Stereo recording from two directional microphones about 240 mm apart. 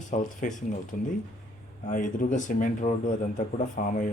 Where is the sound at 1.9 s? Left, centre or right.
Left.